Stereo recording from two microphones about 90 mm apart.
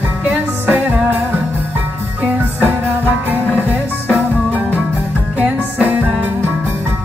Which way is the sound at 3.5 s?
20° left (ahead or behind).